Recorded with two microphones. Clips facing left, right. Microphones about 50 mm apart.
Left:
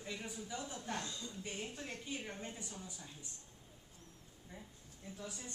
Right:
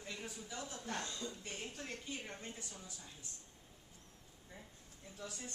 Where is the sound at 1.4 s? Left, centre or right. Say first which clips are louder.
Left 2 dB; left.